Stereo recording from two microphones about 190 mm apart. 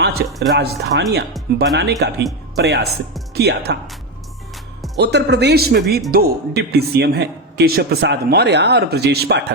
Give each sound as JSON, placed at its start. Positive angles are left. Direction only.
{"t": 0.0, "sound": "a sound", "side_deg": -55}
{"t": 0.5, "sound": "a man's voice", "side_deg": -60}
{"t": 4.9, "sound": "a man's voice", "side_deg": -65}